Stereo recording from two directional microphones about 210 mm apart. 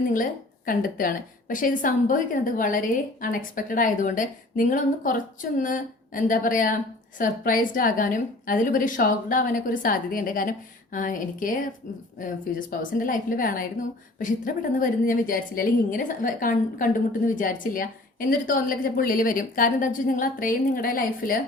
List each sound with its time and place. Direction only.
0.1 s a woman's voice: 40° left (ahead or behind)